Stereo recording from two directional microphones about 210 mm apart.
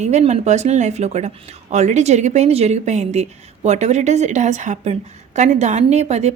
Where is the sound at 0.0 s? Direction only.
30° right (ahead or behind).